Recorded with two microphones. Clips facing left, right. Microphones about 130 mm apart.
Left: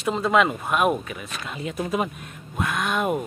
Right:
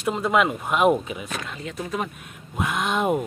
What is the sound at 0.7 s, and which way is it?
Speech, 20° right (ahead or behind).